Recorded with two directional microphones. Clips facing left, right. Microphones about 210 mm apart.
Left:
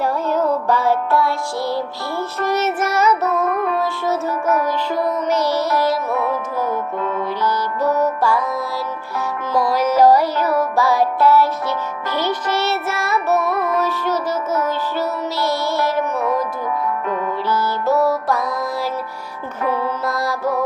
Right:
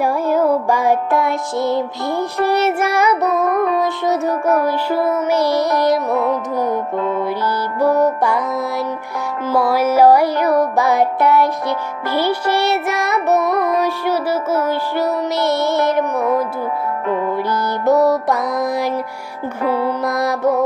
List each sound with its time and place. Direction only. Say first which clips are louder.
0.0 s music: right 3 dB; 10° right (ahead or behind)
7.8 s music: right 4 dB; 15° right (ahead or behind)
9.5 s music: right 2 dB; 10° right (ahead or behind)
17.5 s music: right 2 dB; 15° right (ahead or behind)
19.7 s music: right 3 dB; 15° right (ahead or behind)